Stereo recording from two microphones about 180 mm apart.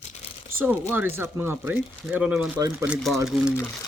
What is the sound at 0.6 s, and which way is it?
Speech, 10° right (ahead or behind).